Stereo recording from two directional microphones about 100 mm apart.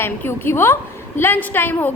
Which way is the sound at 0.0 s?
25° left (ahead or behind).